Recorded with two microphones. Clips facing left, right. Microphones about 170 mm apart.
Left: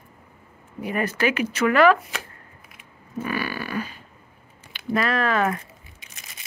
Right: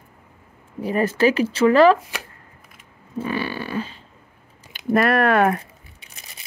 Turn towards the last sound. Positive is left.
turn(degrees=-60)  # may be behind; listen again after turning